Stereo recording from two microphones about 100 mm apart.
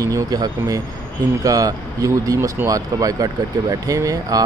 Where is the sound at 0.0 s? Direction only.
40° right (ahead or behind).